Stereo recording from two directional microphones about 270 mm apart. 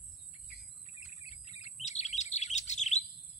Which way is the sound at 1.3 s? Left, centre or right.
Left.